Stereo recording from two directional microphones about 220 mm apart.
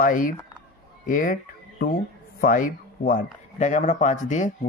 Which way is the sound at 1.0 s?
40° left (ahead or behind).